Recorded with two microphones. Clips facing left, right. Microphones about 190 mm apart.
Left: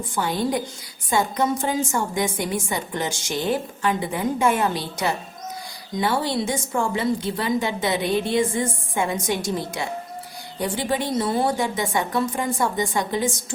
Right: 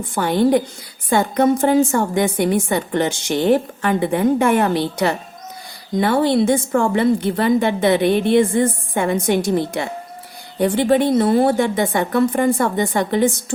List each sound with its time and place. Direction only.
0.1 s a woman's voice: 60° right (ahead or behind)